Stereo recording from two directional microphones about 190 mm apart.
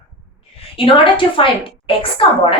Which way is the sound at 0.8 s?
30° left (ahead or behind).